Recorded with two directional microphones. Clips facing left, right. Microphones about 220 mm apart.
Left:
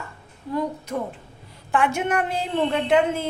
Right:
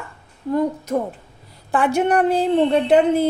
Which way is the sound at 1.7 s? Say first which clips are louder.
Right 5 dB; 35° right (ahead or behind).